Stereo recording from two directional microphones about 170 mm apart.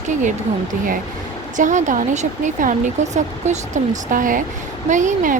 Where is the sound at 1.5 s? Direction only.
50° right (ahead or behind).